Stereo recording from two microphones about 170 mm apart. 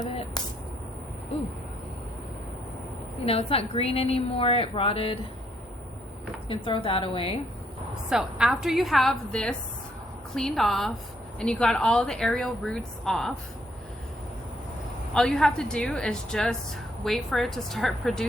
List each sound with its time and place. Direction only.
3.2 s a woman's voice: 35° left (ahead or behind)
6.5 s a woman's voice: 30° left (ahead or behind)
8.1 s speech: 5° right (ahead or behind)
15.1 s speech: 5° left (ahead or behind)